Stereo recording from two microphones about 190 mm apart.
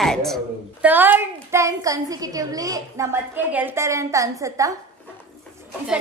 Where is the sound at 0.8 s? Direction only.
10° right (ahead or behind).